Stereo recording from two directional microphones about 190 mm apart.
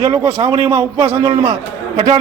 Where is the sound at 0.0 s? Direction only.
20° right (ahead or behind).